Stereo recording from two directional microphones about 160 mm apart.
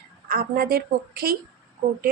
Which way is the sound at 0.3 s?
70° right (ahead or behind).